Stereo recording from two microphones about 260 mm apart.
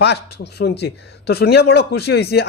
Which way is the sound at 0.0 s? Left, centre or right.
Left.